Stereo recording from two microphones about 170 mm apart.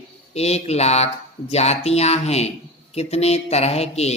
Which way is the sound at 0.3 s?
40° left (ahead or behind).